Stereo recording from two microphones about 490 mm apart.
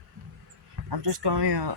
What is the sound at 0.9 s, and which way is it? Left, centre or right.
Speech, right.